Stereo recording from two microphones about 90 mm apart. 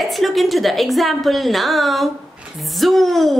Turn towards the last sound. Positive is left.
turn(degrees=0)  # may be behind; listen again after turning